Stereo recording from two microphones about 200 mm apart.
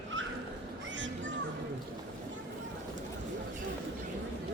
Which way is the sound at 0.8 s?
70° right (ahead or behind).